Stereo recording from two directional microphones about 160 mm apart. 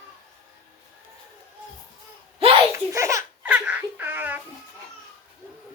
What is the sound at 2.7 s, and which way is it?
Laughter, 20° right (ahead or behind).